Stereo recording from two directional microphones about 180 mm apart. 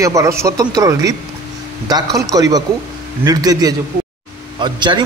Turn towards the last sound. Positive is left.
turn(degrees=-25)  # may be behind; listen again after turning